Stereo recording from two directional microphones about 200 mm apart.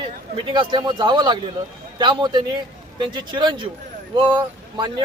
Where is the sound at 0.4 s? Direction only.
25° right (ahead or behind).